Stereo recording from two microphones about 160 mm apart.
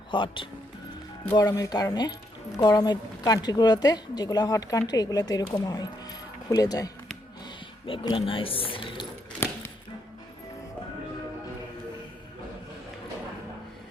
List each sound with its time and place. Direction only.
0.1 s speech: 30° left (ahead or behind)
1.5 s a woman's voice: 20° left (ahead or behind)
7.9 s speech: 35° left (ahead or behind)